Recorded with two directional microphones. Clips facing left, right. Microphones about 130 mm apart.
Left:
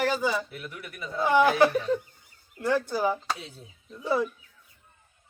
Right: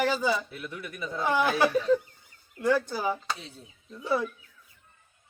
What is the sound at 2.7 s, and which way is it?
Speech, 15° left (ahead or behind).